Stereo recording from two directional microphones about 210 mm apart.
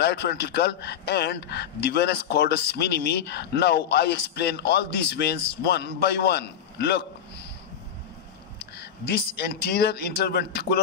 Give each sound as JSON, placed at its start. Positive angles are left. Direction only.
{"t": 0.0, "sound": "a man's voice", "side_deg": 50}
{"t": 8.7, "sound": "a man's voice", "side_deg": 50}